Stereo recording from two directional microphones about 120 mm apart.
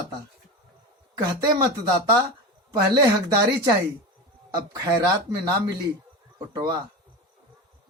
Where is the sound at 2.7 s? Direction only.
35° right (ahead or behind).